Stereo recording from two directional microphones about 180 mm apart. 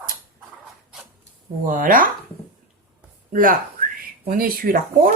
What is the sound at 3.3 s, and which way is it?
Speech, 50° right (ahead or behind).